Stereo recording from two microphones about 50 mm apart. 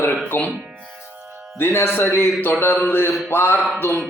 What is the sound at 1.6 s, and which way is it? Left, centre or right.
Speech, left.